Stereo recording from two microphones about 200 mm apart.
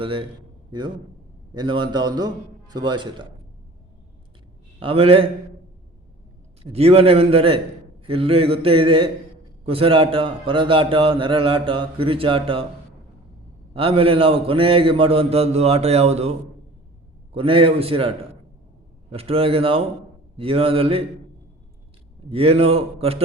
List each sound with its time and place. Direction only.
0.0 s a man's voice: 25° right (ahead or behind)
1.5 s a man's voice: 25° right (ahead or behind)
4.8 s a man's voice: 30° right (ahead or behind)
6.6 s a man's voice: 30° right (ahead or behind)
13.7 s a man's voice: 30° right (ahead or behind)
17.3 s a man's voice: 25° right (ahead or behind)
22.3 s a man's voice: 30° right (ahead or behind)